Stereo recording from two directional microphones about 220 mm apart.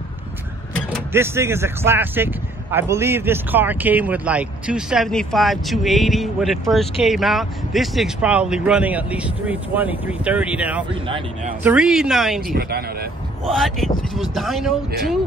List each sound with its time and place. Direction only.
1.1 s speech: 10° right (ahead or behind)
11.1 s speech: 25° right (ahead or behind)
11.6 s speech: 5° right (ahead or behind)
12.4 s speech: 45° right (ahead or behind)
13.5 s speech: centre (ahead or behind)